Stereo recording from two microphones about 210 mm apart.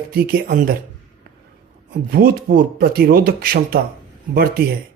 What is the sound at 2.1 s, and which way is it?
Speech, 45° right (ahead or behind).